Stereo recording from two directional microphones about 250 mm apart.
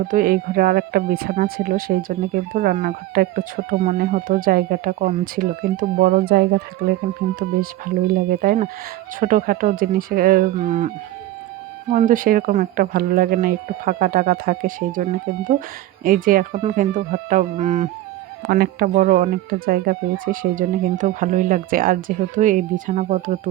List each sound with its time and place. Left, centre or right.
0.1 s speech: right
16.0 s speech: right